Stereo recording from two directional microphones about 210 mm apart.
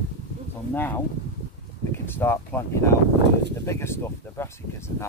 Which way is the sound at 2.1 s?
10° left (ahead or behind).